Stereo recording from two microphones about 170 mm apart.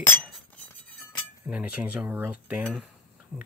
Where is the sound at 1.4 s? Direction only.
10° right (ahead or behind).